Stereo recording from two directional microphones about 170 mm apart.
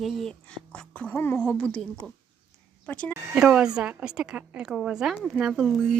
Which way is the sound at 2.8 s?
5° left (ahead or behind).